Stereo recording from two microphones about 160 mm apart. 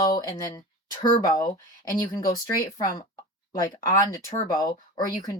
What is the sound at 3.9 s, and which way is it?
Speech, 20° left (ahead or behind).